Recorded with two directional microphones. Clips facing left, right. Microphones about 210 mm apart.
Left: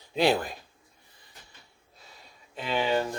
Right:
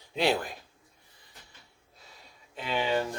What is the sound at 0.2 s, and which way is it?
Speech, 40° left (ahead or behind).